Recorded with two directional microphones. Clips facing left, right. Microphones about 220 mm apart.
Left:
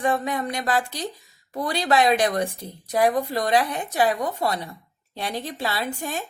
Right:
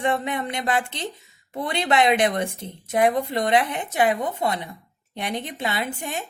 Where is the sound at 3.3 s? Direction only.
25° right (ahead or behind).